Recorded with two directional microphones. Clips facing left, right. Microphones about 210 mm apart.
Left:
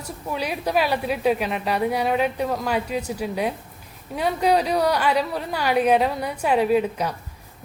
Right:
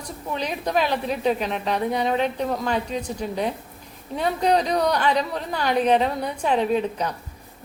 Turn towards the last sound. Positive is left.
turn(degrees=10)  # may be behind; listen again after turning